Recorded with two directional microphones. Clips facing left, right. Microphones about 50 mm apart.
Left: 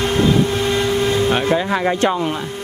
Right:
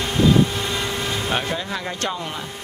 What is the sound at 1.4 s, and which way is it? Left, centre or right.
Speech, left.